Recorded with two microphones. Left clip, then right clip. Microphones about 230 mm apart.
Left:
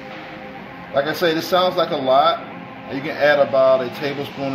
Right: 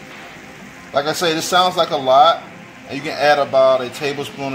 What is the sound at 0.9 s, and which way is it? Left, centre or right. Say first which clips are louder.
Speech: right 1 dB; centre.